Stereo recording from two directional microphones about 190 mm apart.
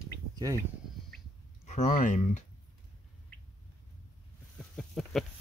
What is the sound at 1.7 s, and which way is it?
Speech, 40° left (ahead or behind).